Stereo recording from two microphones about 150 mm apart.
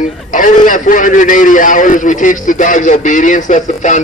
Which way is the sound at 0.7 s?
60° left (ahead or behind).